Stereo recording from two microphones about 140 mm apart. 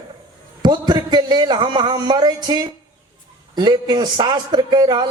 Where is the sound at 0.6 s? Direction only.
30° right (ahead or behind).